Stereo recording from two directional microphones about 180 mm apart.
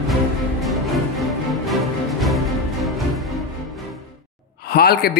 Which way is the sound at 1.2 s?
Centre (ahead or behind).